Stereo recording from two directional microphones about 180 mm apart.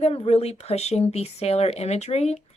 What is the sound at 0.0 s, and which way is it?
Speech, 35° left (ahead or behind).